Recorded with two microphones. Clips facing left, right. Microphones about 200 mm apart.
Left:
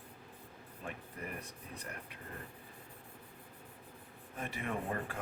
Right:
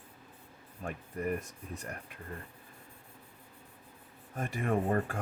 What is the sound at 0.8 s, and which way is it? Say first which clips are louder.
Speech: right 9 dB; 45° right (ahead or behind).